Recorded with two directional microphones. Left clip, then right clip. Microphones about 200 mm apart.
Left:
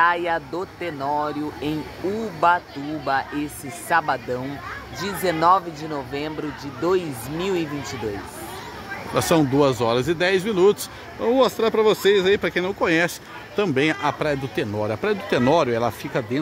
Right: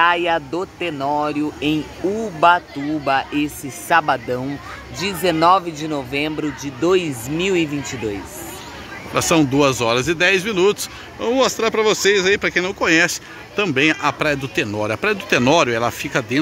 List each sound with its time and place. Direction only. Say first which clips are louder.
0.0 s speech: right 4 dB; 20° right (ahead or behind)
9.1 s speech: right 3 dB; 10° left (ahead or behind)